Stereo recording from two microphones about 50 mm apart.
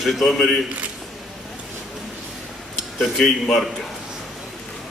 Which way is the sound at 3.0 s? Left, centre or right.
Centre.